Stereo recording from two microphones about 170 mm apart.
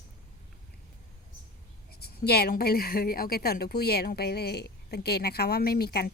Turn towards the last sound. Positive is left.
turn(degrees=70)  # may be behind; listen again after turning